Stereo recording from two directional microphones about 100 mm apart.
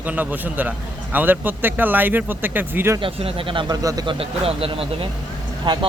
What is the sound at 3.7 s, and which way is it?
Speech, 40° right (ahead or behind).